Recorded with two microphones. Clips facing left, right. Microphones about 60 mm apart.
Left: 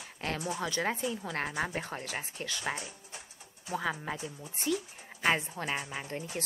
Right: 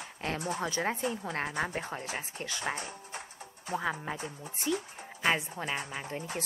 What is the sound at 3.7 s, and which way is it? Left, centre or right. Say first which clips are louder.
Speech: right 1 dB; right.